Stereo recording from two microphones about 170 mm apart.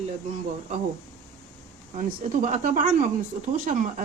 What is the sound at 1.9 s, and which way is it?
Speech, 45° right (ahead or behind).